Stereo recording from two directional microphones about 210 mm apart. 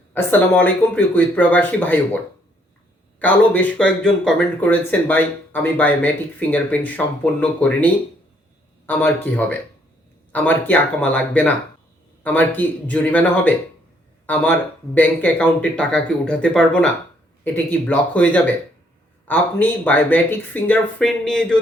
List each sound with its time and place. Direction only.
0.1 s speech: 10° left (ahead or behind)
3.2 s speech: 5° left (ahead or behind)
8.9 s speech: 10° left (ahead or behind)
14.9 s speech: 5° left (ahead or behind)